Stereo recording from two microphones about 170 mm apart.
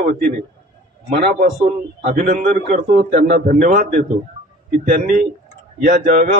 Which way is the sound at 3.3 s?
60° right (ahead or behind).